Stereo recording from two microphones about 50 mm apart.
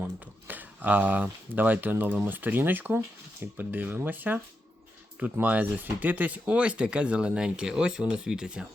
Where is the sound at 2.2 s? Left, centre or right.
Right.